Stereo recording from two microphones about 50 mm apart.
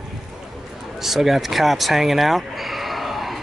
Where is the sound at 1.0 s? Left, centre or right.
Centre.